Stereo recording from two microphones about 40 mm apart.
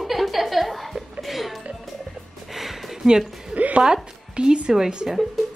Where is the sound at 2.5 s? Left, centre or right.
Centre.